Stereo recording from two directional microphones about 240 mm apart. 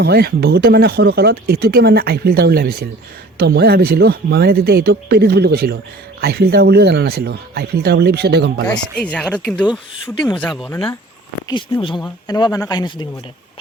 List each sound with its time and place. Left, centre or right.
0.0 s speech: right
8.6 s speech: centre
11.5 s speech: left